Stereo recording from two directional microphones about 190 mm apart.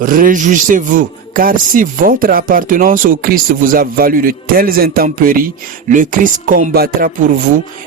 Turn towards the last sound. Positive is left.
turn(degrees=-45)  # may be behind; listen again after turning